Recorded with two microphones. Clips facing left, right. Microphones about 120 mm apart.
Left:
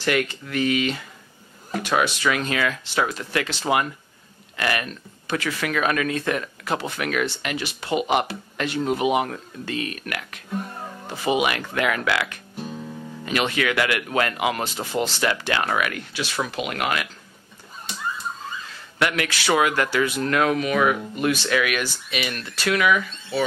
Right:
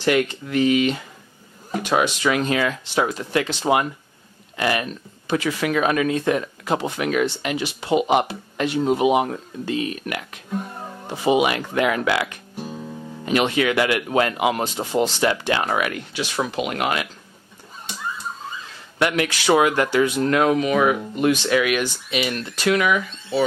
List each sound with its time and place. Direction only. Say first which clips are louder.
0.0 s speech: right 4 dB; 15° right (ahead or behind)
10.5 s speech: right 1 dB; 5° right (ahead or behind); by 12.4 s 20° right (ahead or behind)
12.5 s guitar: right 1 dB; 10° right (ahead or behind)
13.3 s speech: right 4 dB; 20° right (ahead or behind)
18.9 s speech: right 3 dB; 20° right (ahead or behind)